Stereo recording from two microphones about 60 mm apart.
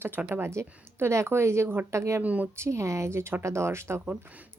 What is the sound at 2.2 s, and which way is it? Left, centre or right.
Speech, right.